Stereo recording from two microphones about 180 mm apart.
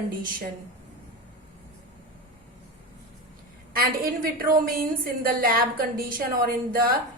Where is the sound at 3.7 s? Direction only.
55° right (ahead or behind).